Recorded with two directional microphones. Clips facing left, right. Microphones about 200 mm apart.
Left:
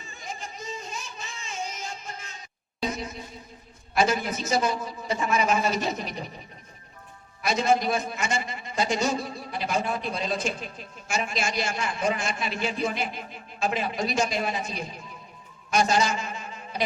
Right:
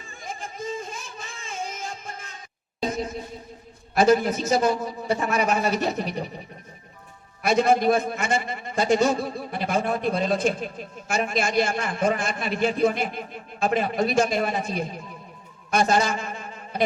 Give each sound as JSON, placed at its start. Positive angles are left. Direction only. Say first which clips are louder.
{"t": 0.1, "sound": "singing", "louder": "right 2 dB", "side_deg": -50}
{"t": 2.8, "sound": "a sound", "louder": "right 4 dB", "side_deg": -50}
{"t": 4.4, "sound": "a man's voice", "louder": "right 4 dB", "side_deg": -55}
{"t": 7.4, "sound": "a man's voice", "louder": "right 4 dB", "side_deg": -55}